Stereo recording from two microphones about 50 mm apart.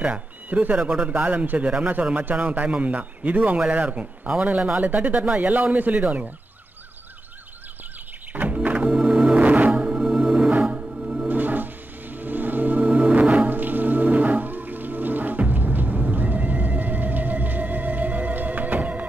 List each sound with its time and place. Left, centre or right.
0.0 s a man's voice: right
8.3 s music: right
11.2 s music: right